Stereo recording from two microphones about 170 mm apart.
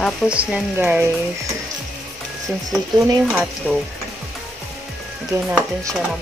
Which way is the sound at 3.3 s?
Centre (ahead or behind).